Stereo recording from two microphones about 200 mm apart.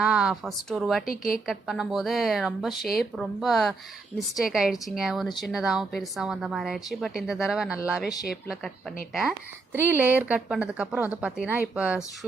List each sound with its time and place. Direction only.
0.0 s a woman's voice: 5° right (ahead or behind)
1.1 s a woman's voice: 45° left (ahead or behind)
1.5 s a woman's voice: centre (ahead or behind)
9.7 s a woman's voice: 10° right (ahead or behind)